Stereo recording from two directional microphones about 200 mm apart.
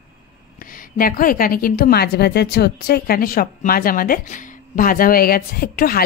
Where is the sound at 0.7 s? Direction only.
45° left (ahead or behind).